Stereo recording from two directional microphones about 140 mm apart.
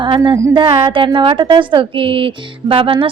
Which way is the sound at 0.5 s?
40° right (ahead or behind).